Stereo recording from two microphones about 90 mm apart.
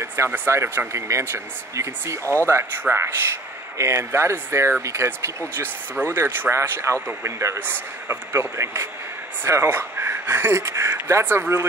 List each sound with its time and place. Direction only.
0.0 s speech: 30° right (ahead or behind)
2.2 s speech: 25° left (ahead or behind)
2.5 s speech: 25° right (ahead or behind)